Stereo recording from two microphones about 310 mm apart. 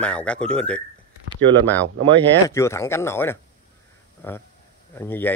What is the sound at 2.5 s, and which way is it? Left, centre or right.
Speech, centre.